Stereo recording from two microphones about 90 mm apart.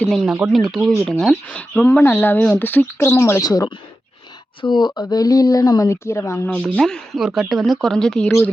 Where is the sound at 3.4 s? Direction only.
45° left (ahead or behind).